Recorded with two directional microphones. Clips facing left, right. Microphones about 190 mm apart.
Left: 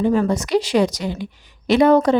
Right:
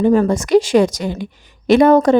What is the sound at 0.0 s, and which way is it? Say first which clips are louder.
A woman's voice: right 4 dB; 45° right (ahead or behind).